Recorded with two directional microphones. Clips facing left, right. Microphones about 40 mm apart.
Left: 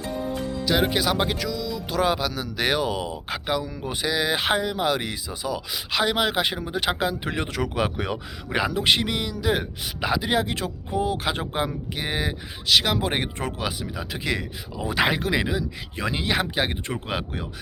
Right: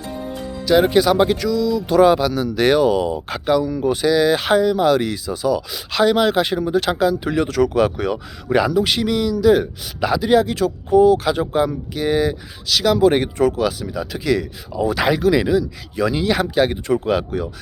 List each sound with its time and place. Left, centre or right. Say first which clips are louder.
0.6 s speech: right 9 dB; centre
7.0 s speech: right 8 dB; left
8.7 s speech: right 4 dB; left
15.0 s speech: right 7 dB; left